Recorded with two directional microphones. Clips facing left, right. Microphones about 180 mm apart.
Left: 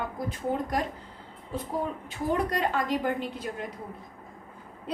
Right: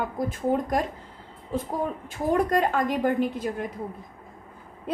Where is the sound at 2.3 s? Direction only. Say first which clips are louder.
Right 5 dB; 50° right (ahead or behind).